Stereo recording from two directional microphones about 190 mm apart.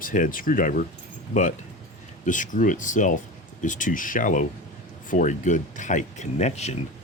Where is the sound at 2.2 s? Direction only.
40° left (ahead or behind).